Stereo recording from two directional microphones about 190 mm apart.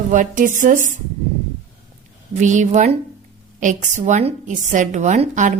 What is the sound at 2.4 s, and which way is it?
A woman's voice, 40° right (ahead or behind).